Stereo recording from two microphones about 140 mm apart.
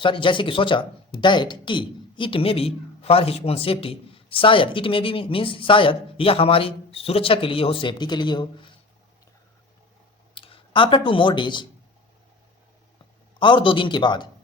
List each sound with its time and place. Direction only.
0.0 s speech: 35° left (ahead or behind)
10.3 s speech: 40° left (ahead or behind)
13.4 s speech: 35° left (ahead or behind)